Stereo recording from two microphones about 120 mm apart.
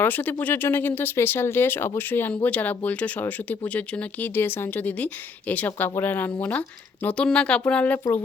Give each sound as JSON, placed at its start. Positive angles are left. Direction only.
{"t": 0.0, "sound": "speech", "side_deg": 15}
{"t": 7.9, "sound": "speech", "side_deg": 20}